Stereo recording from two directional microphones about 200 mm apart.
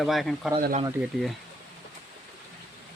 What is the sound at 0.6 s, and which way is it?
Speech, 40° right (ahead or behind).